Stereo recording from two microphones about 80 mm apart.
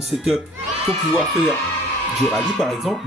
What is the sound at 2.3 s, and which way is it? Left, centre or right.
Speech, centre.